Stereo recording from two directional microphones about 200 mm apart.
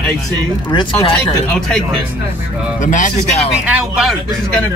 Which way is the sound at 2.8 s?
40° left (ahead or behind).